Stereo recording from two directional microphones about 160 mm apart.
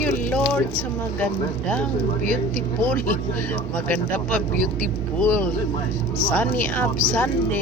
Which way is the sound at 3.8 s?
10° left (ahead or behind).